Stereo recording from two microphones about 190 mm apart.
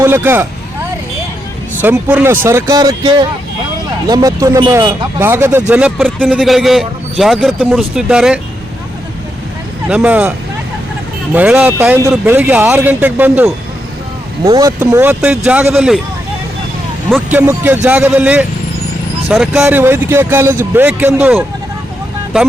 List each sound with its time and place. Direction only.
0.0 s speech: 10° right (ahead or behind)
1.8 s a man's voice: 10° right (ahead or behind)
9.9 s speech: 10° right (ahead or behind)
11.3 s speech: 5° right (ahead or behind)
17.3 s a man's voice: 10° right (ahead or behind)